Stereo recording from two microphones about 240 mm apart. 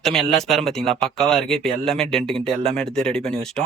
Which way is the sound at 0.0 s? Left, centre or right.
Centre.